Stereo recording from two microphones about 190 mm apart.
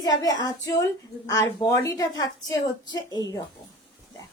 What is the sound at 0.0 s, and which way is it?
A woman's voice, 20° left (ahead or behind).